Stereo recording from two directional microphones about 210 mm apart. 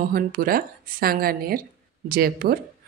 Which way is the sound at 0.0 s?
45° right (ahead or behind).